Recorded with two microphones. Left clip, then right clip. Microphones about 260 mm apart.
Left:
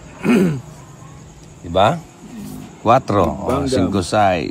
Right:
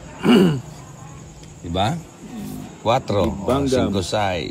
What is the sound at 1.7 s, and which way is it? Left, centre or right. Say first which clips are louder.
Speech: left 8 dB; centre.